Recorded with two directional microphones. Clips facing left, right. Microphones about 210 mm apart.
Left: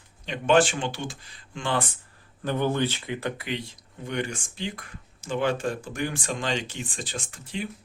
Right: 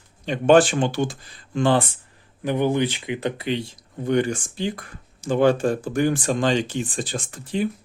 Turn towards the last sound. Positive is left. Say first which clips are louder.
# right 8 dB
turn(degrees=-40)  # may be behind; listen again after turning